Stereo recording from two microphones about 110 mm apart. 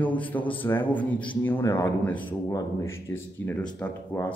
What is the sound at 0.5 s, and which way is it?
Speech, 15° left (ahead or behind).